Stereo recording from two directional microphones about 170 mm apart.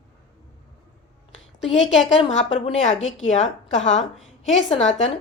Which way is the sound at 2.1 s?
40° left (ahead or behind).